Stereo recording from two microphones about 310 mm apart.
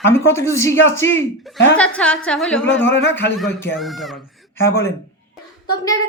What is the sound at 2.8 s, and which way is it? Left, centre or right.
Speech, left.